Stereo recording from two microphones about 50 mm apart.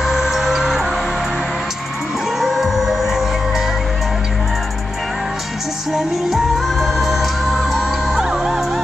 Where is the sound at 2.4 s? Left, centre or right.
Centre.